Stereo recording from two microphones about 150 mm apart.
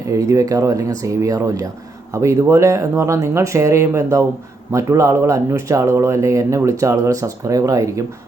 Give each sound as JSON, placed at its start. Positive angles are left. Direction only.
{"t": 0.1, "sound": "speech", "side_deg": -20}